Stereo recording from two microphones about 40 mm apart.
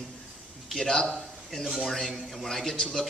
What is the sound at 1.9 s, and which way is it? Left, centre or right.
Speech, centre.